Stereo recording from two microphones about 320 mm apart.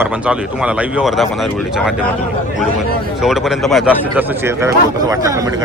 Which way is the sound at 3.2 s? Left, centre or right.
Centre.